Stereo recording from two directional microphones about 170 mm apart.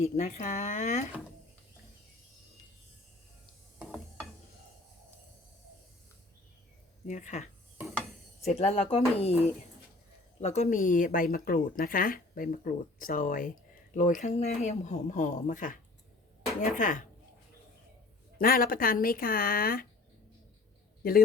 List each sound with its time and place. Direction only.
0.0 s speech: 45° left (ahead or behind)
3.8 s a sound: 5° left (ahead or behind)
7.1 s speech: 45° left (ahead or behind)
8.5 s speech: 40° left (ahead or behind)
18.3 s speech: 60° left (ahead or behind)